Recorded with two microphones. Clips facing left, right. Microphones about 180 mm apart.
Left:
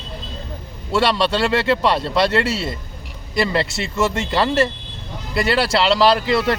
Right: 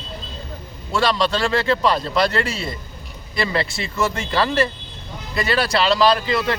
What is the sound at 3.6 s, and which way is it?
Speech, 25° left (ahead or behind).